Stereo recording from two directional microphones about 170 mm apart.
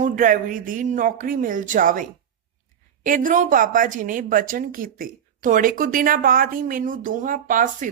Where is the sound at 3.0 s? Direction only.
50° right (ahead or behind).